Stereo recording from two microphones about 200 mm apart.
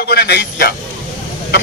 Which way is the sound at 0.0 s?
50° left (ahead or behind).